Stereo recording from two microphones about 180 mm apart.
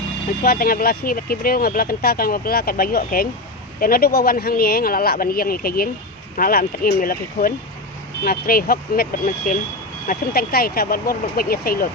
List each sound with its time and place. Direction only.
0.4 s speech: 55° left (ahead or behind)